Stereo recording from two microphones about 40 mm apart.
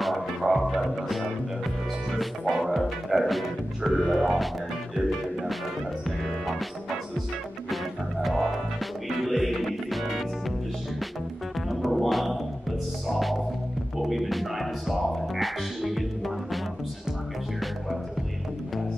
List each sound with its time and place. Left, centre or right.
0.0 s music: centre
7.7 s music: centre
11.7 s music: centre